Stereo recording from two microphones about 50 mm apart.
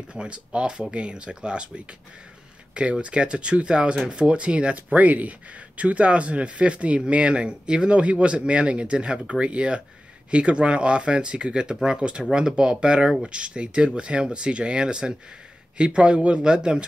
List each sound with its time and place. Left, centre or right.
0.1 s speech: right
2.7 s speech: right